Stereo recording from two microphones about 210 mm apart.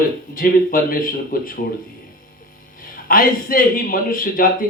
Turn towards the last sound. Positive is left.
turn(degrees=40)  # may be behind; listen again after turning